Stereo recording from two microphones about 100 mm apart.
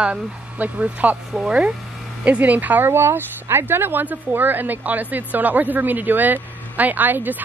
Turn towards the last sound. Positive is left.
turn(degrees=-20)  # may be behind; listen again after turning